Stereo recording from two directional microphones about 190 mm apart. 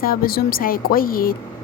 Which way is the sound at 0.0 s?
50° left (ahead or behind).